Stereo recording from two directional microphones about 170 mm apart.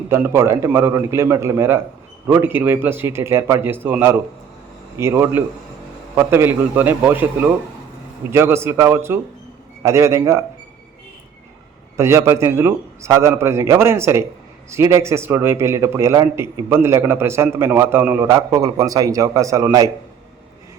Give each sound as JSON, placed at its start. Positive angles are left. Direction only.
{"t": 0.1, "sound": "a man's voice", "side_deg": -15}
{"t": 11.9, "sound": "a man's voice", "side_deg": -15}